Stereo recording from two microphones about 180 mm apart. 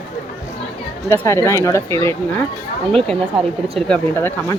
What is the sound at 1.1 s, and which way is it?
Speech, 15° left (ahead or behind).